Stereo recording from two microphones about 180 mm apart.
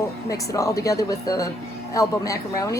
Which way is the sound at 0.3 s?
20° left (ahead or behind).